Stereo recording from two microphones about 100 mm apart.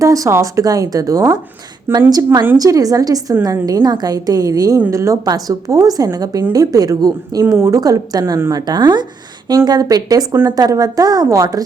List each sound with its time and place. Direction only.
0.0 s a woman's voice: 35° right (ahead or behind)